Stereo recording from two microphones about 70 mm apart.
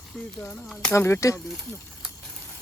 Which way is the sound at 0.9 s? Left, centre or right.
Left.